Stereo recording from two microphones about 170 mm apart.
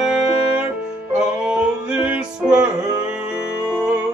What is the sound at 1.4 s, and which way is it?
Music, 5° right (ahead or behind).